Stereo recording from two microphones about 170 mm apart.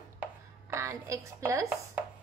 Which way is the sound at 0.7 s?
15° right (ahead or behind).